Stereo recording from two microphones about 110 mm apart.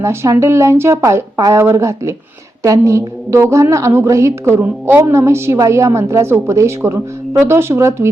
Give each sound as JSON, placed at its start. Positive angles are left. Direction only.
{"t": 0.0, "sound": "a woman's voice", "side_deg": -25}